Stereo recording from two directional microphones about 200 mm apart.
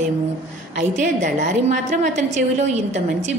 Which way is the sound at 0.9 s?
40° right (ahead or behind).